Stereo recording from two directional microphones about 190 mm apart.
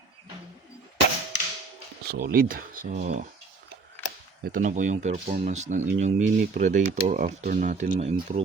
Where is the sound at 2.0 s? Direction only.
55° right (ahead or behind).